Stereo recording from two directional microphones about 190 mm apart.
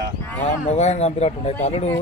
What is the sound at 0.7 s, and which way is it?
Speech, 35° left (ahead or behind).